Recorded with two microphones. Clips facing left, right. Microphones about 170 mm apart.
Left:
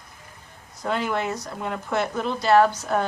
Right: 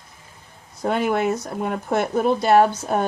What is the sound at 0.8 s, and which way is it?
Speech, 50° right (ahead or behind).